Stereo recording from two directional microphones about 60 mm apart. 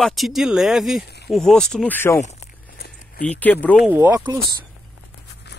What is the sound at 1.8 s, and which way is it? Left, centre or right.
Speech, left.